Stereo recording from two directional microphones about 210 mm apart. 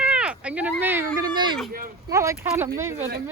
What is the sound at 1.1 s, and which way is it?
Speech, 20° right (ahead or behind).